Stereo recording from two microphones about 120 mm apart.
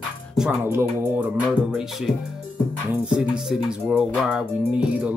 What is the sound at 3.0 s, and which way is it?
Speech, 5° right (ahead or behind).